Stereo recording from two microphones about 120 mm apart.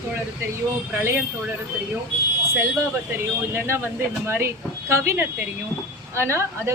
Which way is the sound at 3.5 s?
20° right (ahead or behind).